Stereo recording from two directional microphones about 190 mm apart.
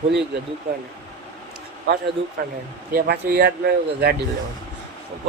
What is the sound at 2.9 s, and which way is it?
Speech, 55° right (ahead or behind).